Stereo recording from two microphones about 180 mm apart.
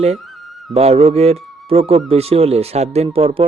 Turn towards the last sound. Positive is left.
turn(degrees=-30)  # may be behind; listen again after turning